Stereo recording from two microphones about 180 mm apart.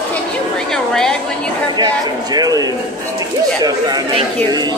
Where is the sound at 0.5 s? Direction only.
5° left (ahead or behind).